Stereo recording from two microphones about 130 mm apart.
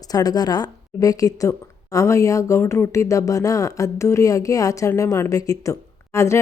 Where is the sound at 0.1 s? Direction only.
30° left (ahead or behind).